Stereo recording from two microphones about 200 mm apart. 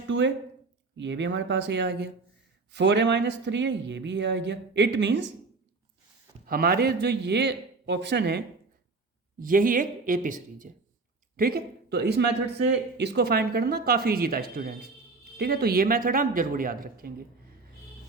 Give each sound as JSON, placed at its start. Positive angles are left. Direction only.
{"t": 0.1, "sound": "speech", "side_deg": -70}
{"t": 6.4, "sound": "speech", "side_deg": -45}
{"t": 9.4, "sound": "a man's voice", "side_deg": -45}